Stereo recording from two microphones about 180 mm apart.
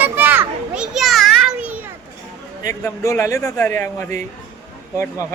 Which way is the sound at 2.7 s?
15° left (ahead or behind).